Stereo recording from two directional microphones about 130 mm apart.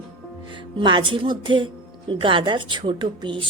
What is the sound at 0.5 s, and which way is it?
Speech, 40° right (ahead or behind).